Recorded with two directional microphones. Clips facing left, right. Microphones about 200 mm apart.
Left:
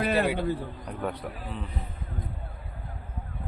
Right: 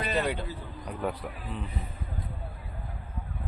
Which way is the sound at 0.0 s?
55° left (ahead or behind).